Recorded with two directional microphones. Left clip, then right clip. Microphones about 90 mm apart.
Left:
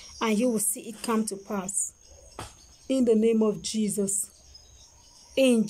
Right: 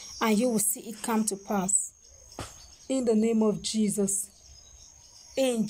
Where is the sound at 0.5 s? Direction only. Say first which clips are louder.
Left 1 dB; 10° left (ahead or behind).